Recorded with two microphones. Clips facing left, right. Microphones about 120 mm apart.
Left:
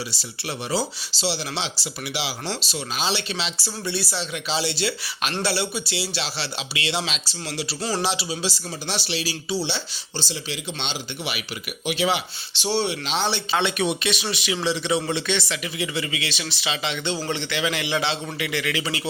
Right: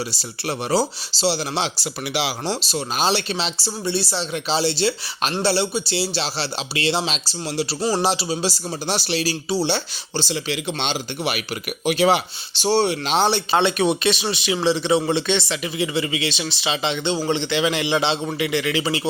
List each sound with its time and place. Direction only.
0.1 s speech: 40° right (ahead or behind)
2.6 s speech: 40° right (ahead or behind)
7.8 s speech: 15° right (ahead or behind)
8.0 s speech: 40° right (ahead or behind)
10.2 s speech: 65° right (ahead or behind)
11.2 s speech: 45° right (ahead or behind); by 19.0 s 25° right (ahead or behind)